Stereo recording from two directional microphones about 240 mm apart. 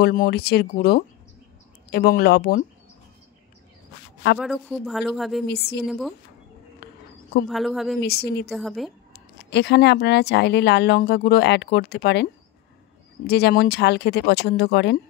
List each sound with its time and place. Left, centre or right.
0.0 s speech: left
4.4 s a woman's voice: centre
5.5 s speech: left
5.9 s a woman's voice: centre
6.8 s a sound: left
7.4 s a woman's voice: centre
8.0 s speech: left
8.5 s a woman's voice: centre
9.1 s speech: left
13.3 s speech: left